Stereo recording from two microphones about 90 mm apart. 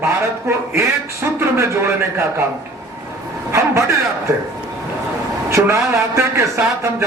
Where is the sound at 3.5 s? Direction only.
35° right (ahead or behind).